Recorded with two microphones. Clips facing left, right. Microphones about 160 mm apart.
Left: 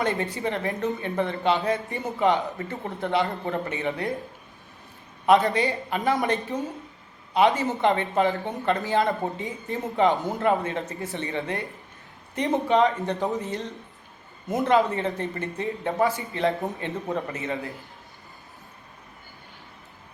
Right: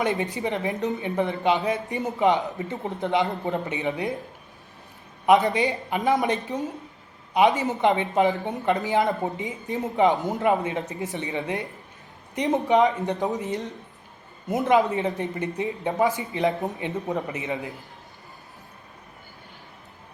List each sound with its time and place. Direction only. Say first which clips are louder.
0.0 s speech: right 1 dB; 20° right (ahead or behind)
5.2 s speech: right 1 dB; 20° right (ahead or behind)